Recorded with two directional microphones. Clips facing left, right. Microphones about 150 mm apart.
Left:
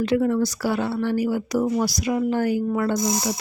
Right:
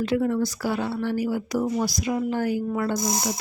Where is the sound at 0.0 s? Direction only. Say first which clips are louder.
Left 3 dB; 75° left (ahead or behind).